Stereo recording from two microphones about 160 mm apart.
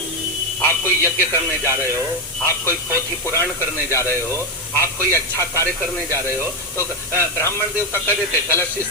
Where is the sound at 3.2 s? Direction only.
15° left (ahead or behind).